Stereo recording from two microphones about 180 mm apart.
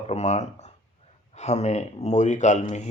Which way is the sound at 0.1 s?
35° left (ahead or behind).